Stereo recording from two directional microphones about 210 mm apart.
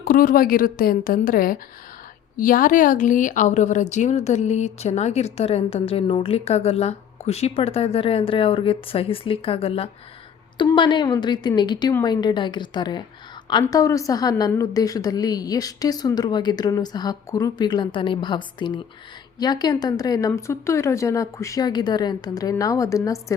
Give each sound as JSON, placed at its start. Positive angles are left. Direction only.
{"t": 0.0, "sound": "a woman's voice", "side_deg": 45}